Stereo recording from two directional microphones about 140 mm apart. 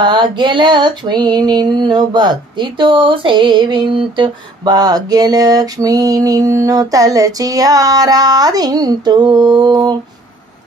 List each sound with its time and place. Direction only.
0.0 s female singing: 35° right (ahead or behind)